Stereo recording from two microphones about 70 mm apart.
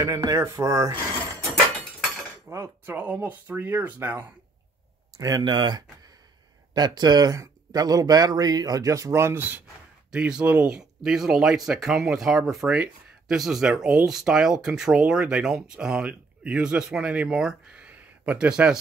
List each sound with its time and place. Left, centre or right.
0.3 s cutlery: right
2.4 s cutlery: right
3.0 s speech: right
5.1 s speech: right
6.7 s speech: right
7.3 s speech: right
10.1 s speech: centre
10.8 s speech: centre
12.7 s speech: centre
17.8 s a sound: right
18.5 s speech: centre